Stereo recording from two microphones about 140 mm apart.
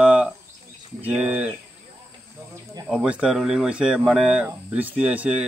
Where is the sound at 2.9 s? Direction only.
5° right (ahead or behind).